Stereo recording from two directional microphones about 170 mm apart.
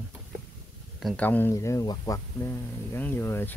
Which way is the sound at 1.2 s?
10° left (ahead or behind).